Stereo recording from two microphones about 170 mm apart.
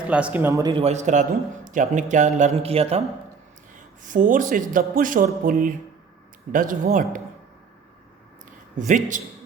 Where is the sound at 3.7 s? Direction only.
50° right (ahead or behind).